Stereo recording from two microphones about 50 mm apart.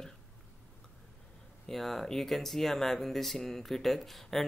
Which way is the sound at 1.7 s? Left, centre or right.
Centre.